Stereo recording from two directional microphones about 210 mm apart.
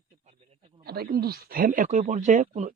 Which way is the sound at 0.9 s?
50° right (ahead or behind).